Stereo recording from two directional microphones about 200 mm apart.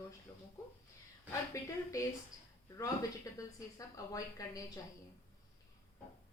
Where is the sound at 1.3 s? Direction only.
15° left (ahead or behind).